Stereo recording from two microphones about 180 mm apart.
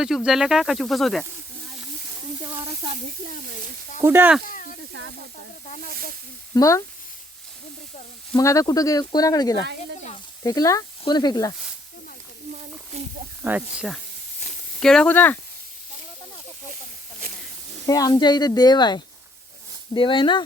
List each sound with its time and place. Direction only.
0.3 s speech: centre (ahead or behind)
4.0 s speech: 10° right (ahead or behind)
4.4 s speech: 50° left (ahead or behind)
4.9 s speech: 70° right (ahead or behind)
6.5 s speech: 15° left (ahead or behind)
8.4 s speech: 20° left (ahead or behind)
13.4 s speech: 5° right (ahead or behind); by 15.4 s 10° left (ahead or behind)
17.8 s speech: 20° left (ahead or behind)